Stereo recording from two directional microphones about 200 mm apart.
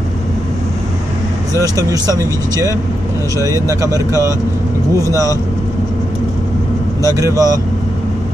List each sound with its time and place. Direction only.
1.6 s speech: 15° right (ahead or behind)
7.0 s speech: 15° right (ahead or behind)